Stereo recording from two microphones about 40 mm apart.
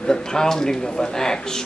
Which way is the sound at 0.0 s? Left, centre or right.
Centre.